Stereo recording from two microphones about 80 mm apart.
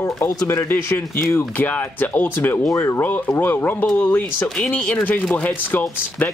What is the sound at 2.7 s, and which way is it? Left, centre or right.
Speech, left.